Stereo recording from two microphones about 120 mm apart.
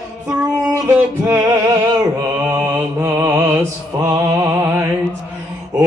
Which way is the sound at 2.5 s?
15° right (ahead or behind).